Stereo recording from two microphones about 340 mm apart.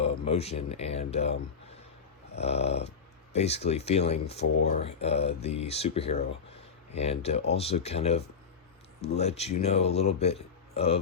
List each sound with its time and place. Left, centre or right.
0.0 s speech: centre